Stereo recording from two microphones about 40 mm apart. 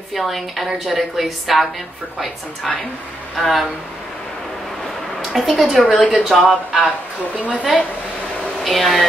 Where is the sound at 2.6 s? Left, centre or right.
Left.